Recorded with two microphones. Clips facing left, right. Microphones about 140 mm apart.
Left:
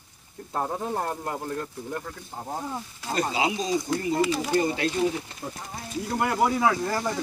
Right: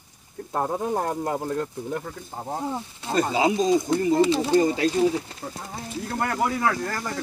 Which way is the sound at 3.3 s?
45° right (ahead or behind).